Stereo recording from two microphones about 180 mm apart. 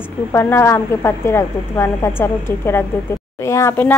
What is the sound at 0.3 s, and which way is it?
A woman's voice, 15° left (ahead or behind).